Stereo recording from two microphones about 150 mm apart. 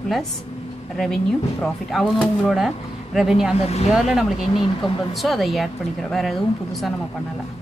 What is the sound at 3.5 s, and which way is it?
Speech, 45° left (ahead or behind).